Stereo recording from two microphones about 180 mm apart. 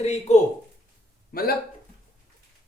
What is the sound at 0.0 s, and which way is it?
Speech, 35° left (ahead or behind).